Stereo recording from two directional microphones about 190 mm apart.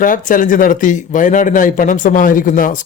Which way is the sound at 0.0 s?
45° left (ahead or behind).